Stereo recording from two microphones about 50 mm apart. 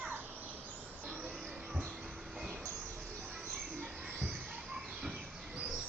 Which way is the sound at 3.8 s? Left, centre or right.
Centre.